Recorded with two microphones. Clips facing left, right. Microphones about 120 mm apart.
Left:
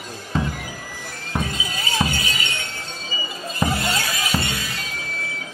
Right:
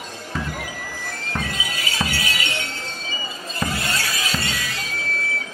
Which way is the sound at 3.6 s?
20° left (ahead or behind).